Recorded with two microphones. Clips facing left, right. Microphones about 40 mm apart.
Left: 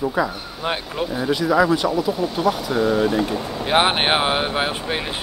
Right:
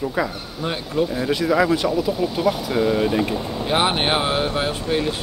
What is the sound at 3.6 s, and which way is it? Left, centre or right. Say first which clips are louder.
Speech: left 2 dB; left.